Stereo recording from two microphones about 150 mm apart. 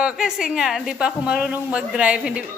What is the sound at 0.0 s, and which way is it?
A woman's voice, 5° right (ahead or behind).